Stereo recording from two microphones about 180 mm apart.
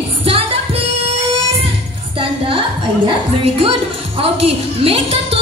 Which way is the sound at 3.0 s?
30° right (ahead or behind).